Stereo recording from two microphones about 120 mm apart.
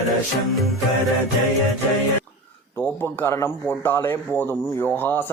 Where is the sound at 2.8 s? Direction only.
15° left (ahead or behind).